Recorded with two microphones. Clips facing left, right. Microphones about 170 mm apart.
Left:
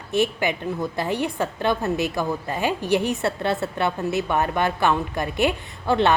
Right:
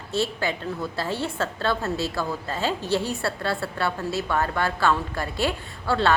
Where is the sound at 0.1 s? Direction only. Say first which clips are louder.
Left 4 dB; 15° left (ahead or behind).